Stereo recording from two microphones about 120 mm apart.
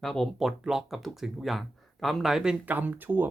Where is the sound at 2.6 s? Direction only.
15° right (ahead or behind).